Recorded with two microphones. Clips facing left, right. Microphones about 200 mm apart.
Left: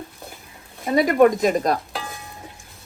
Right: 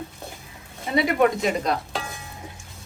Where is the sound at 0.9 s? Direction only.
45° left (ahead or behind).